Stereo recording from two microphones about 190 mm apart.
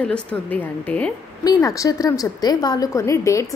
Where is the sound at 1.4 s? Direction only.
15° left (ahead or behind).